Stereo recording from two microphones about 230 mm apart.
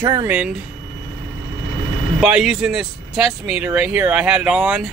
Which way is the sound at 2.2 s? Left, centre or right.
Centre.